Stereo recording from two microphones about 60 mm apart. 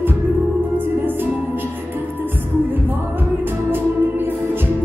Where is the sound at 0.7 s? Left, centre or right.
Right.